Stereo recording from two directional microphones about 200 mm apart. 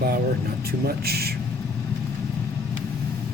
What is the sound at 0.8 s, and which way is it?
Speech, 50° right (ahead or behind).